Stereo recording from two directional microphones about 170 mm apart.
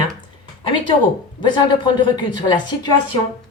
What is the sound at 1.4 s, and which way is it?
Speech, 25° left (ahead or behind).